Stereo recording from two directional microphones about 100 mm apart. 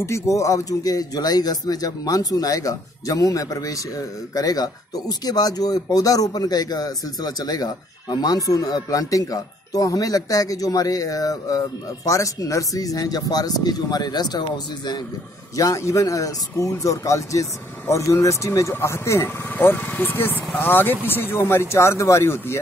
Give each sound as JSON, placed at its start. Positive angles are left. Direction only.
{"t": 0.0, "sound": "speech", "side_deg": 30}
{"t": 15.5, "sound": "speech", "side_deg": 35}